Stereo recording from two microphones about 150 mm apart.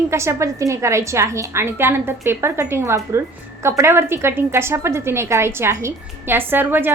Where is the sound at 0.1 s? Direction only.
20° right (ahead or behind).